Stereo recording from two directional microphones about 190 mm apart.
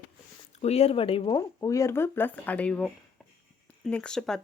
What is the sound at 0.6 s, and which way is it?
Speech, 35° left (ahead or behind).